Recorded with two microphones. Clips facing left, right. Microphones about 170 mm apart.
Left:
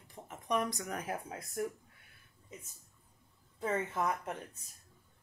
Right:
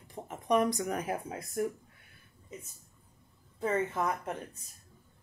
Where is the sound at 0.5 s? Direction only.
15° right (ahead or behind).